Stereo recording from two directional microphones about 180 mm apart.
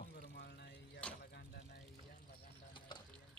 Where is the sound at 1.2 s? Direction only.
65° left (ahead or behind).